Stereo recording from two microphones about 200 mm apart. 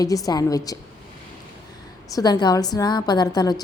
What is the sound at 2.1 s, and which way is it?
A woman's voice, 20° left (ahead or behind).